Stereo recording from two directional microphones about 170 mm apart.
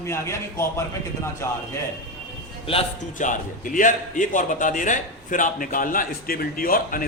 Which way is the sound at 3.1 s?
50° left (ahead or behind).